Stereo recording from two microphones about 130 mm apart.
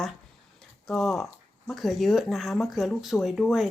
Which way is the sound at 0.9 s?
Centre (ahead or behind).